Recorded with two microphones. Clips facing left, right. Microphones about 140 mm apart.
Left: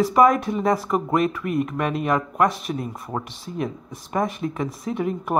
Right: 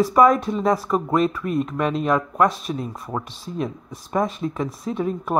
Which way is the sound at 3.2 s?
60° left (ahead or behind).